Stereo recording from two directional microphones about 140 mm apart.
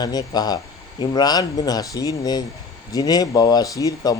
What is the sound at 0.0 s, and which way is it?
A man's voice, 30° left (ahead or behind).